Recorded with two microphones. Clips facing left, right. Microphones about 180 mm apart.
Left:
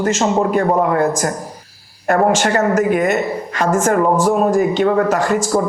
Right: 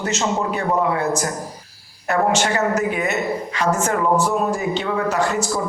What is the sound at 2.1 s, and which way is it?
A woman's voice, 50° left (ahead or behind).